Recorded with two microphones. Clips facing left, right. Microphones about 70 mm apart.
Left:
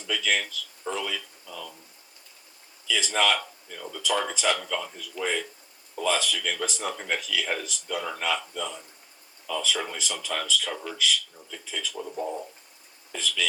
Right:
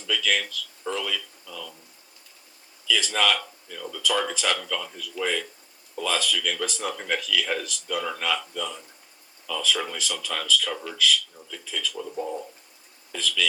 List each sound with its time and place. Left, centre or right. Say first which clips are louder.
0.0 s a sound: right 1 dB; left
2.8 s a man's voice: right 1 dB; left
6.9 s speech: right 2 dB; centre
7.2 s a man's voice: right 3 dB; left
13.1 s a man's voice: right 2 dB; left